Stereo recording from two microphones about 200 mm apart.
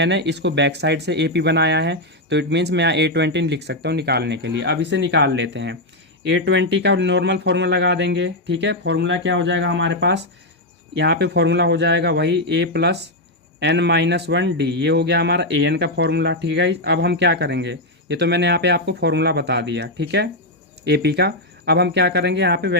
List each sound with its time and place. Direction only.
0.0 s a man's voice: 60° right (ahead or behind)